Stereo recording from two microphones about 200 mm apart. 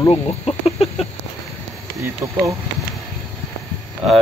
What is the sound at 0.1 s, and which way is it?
Speech, 30° left (ahead or behind).